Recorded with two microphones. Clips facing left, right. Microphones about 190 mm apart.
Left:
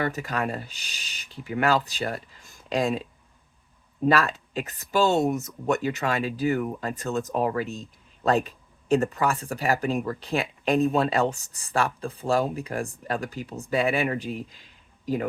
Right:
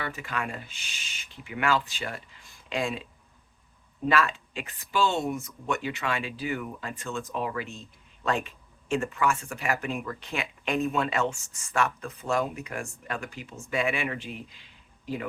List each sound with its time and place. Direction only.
0.0 s speech: 40° left (ahead or behind)
4.0 s speech: 40° left (ahead or behind)